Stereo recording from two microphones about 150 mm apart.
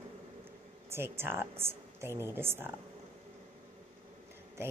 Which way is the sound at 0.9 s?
15° right (ahead or behind).